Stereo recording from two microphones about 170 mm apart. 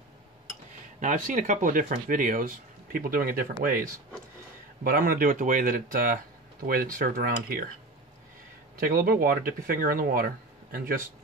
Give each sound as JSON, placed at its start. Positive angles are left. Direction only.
{"t": 0.9, "sound": "speech", "side_deg": -50}
{"t": 8.7, "sound": "speech", "side_deg": -60}